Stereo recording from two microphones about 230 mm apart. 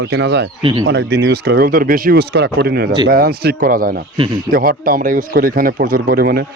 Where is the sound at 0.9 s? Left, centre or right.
Right.